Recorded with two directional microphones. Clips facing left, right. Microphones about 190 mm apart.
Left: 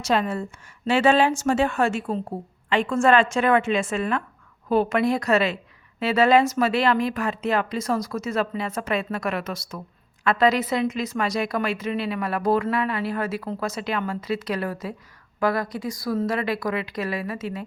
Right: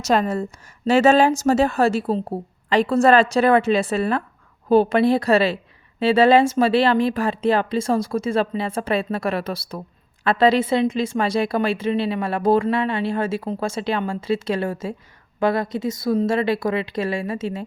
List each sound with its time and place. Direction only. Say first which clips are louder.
0.0 s a woman's voice: right 3 dB; 45° right (ahead or behind); by 17.7 s 25° right (ahead or behind)